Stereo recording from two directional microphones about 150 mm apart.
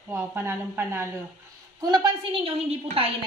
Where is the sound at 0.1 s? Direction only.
15° right (ahead or behind).